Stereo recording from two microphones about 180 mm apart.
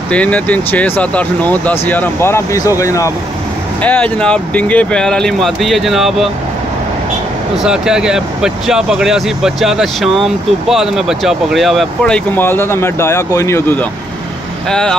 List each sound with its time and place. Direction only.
0.1 s speech: 5° left (ahead or behind)
7.6 s speech: 5° right (ahead or behind)